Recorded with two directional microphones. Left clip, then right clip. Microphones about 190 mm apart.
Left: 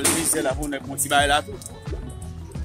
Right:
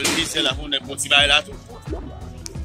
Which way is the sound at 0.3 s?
30° left (ahead or behind).